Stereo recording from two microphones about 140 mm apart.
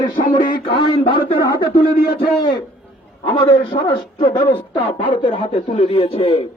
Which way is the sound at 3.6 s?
35° left (ahead or behind).